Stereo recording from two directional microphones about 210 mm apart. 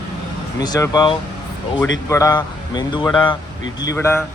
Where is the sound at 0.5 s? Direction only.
20° left (ahead or behind).